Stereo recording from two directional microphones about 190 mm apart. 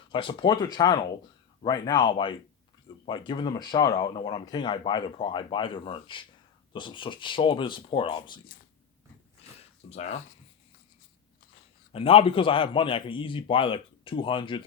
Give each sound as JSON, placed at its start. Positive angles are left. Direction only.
{"t": 0.1, "sound": "a man's voice", "side_deg": 25}
{"t": 9.9, "sound": "speech", "side_deg": 35}
{"t": 11.9, "sound": "a man's voice", "side_deg": 30}